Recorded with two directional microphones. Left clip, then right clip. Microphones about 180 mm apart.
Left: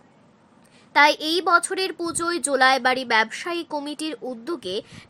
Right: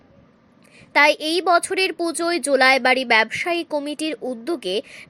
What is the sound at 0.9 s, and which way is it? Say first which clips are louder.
A woman's voice: right 1 dB; 20° right (ahead or behind).